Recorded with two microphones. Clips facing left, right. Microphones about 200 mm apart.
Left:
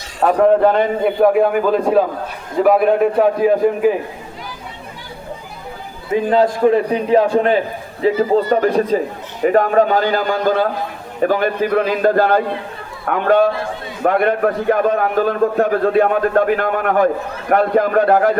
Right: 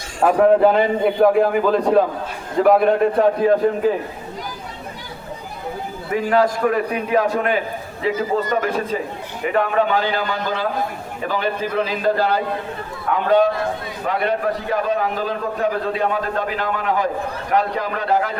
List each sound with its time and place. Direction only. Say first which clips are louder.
0.2 s a man's voice: left 1 dB; 5° right (ahead or behind)
6.1 s a man's voice: left 3 dB; 20° left (ahead or behind); by 18.3 s 50° left (ahead or behind)